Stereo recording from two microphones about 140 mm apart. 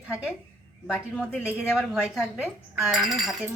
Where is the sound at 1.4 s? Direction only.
5° right (ahead or behind).